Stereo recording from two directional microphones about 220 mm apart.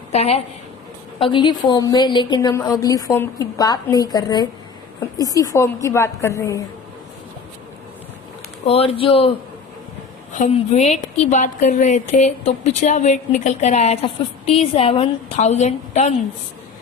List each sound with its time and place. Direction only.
0.1 s a woman's voice: 30° left (ahead or behind); by 6.6 s 15° left (ahead or behind)
8.6 s speech: 25° left (ahead or behind)
10.3 s a woman's voice: 30° left (ahead or behind)